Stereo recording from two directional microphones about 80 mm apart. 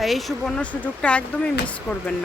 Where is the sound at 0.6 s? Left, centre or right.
Centre.